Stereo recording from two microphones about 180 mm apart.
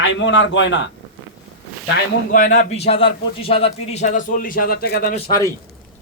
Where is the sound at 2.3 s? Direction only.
45° left (ahead or behind).